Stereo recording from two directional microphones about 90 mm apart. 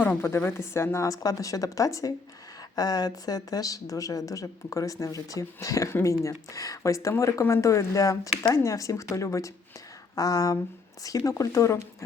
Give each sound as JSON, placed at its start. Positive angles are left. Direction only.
{"t": 0.2, "sound": "a woman's voice", "side_deg": 25}